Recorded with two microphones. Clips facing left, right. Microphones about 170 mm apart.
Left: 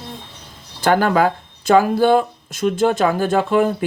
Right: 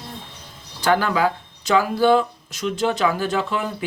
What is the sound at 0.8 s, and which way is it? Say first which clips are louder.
Speech: left 4 dB; 50° left (ahead or behind).